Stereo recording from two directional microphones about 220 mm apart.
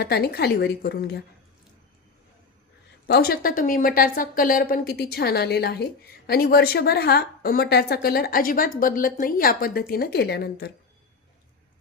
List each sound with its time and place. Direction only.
0.0 s a woman's voice: 45° left (ahead or behind)
3.1 s a woman's voice: 45° left (ahead or behind)